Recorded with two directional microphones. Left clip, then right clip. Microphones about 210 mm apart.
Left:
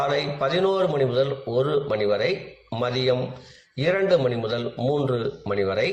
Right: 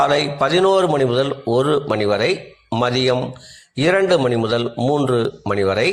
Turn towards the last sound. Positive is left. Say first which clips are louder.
# right 6 dB
turn(degrees=-50)  # may be behind; listen again after turning